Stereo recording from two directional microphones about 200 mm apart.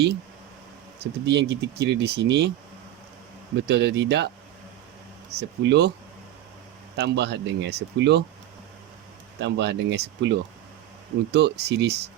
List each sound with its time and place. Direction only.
1.2 s speech: 60° right (ahead or behind)
3.7 s speech: 55° right (ahead or behind)
5.4 s speech: 60° right (ahead or behind)
6.9 s speech: 60° right (ahead or behind)
9.4 s speech: 60° right (ahead or behind)